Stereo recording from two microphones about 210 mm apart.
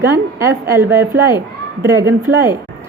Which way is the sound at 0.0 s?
10° right (ahead or behind).